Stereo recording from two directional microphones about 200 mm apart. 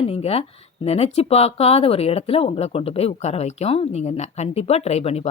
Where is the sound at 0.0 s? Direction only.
30° left (ahead or behind).